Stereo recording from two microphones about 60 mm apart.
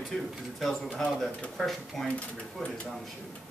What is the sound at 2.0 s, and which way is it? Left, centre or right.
Speech, centre.